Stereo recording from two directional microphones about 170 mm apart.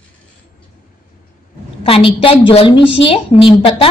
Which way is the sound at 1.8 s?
30° left (ahead or behind).